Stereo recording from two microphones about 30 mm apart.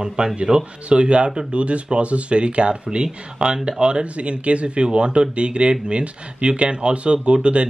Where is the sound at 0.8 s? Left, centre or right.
Right.